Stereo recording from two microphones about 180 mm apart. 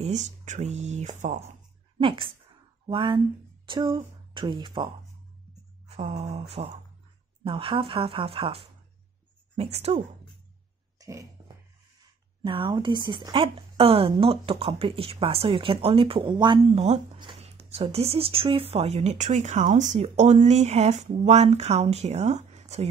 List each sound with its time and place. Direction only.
0.0 s speech: 40° right (ahead or behind)
2.0 s a woman's voice: 30° right (ahead or behind)
5.9 s a sound: 35° right (ahead or behind)
6.2 s speech: 35° right (ahead or behind)
11.0 s a sound: 20° right (ahead or behind)
12.4 s speech: 30° right (ahead or behind)